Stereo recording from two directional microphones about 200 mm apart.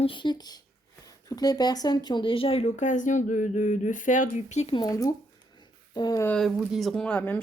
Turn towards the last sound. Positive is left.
turn(degrees=5)  # may be behind; listen again after turning